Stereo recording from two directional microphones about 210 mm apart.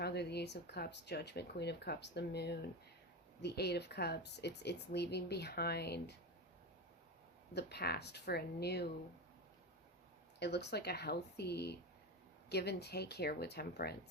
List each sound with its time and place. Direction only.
0.0 s speech: 50° left (ahead or behind)
7.5 s speech: 50° left (ahead or behind)
10.4 s speech: 50° left (ahead or behind)